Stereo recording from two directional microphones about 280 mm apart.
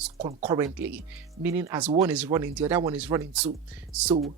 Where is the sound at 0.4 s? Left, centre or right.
Centre.